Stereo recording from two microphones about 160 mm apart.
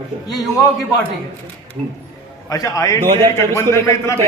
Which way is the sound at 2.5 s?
20° left (ahead or behind).